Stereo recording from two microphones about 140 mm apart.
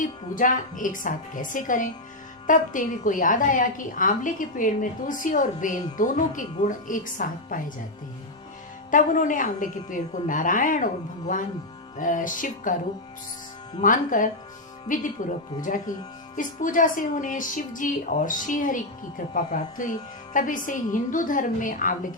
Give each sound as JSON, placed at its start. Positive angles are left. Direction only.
{"t": 0.0, "sound": "speech", "side_deg": 70}
{"t": 8.9, "sound": "speech", "side_deg": 70}
{"t": 11.9, "sound": "speech", "side_deg": 70}
{"t": 13.8, "sound": "speech", "side_deg": 70}